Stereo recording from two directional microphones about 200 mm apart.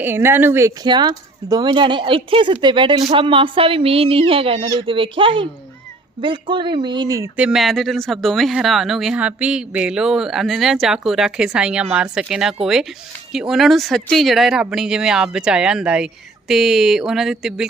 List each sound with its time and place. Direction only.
0.0 s speech: 10° right (ahead or behind)
7.3 s speech: 5° right (ahead or behind)